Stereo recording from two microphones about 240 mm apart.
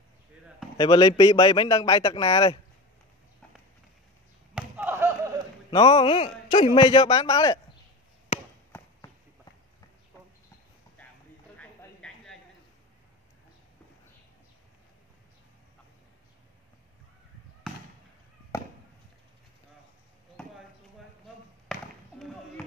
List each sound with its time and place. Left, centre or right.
0.7 s a man's voice: centre
4.6 s basketball bounce: centre
5.7 s a man's voice: left
8.7 s run: centre
11.5 s a sound: centre